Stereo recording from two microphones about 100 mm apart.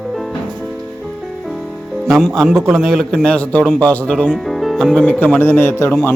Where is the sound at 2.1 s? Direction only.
5° left (ahead or behind).